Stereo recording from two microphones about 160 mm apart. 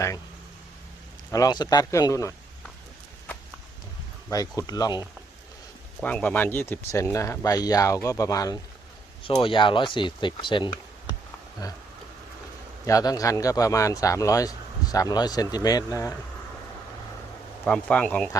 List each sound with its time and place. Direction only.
1.3 s speech: 25° left (ahead or behind)
4.3 s speech: 20° left (ahead or behind)
6.0 s speech: 10° left (ahead or behind)
9.2 s speech: 35° left (ahead or behind)
12.8 s speech: 20° left (ahead or behind)
17.7 s speech: 5° left (ahead or behind)